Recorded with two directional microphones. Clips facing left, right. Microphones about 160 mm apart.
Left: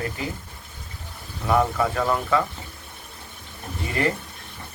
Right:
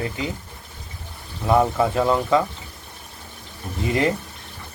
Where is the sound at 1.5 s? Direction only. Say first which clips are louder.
Right 3 dB; 25° right (ahead or behind).